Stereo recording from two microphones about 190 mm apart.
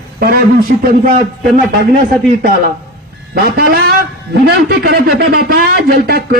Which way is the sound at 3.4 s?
55° right (ahead or behind).